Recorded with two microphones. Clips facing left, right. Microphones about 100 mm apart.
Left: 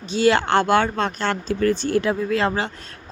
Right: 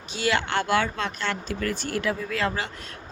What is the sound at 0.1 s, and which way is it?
Speech, 30° left (ahead or behind).